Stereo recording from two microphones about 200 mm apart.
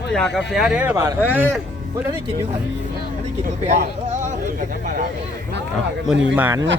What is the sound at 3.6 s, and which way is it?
Speech, 35° right (ahead or behind).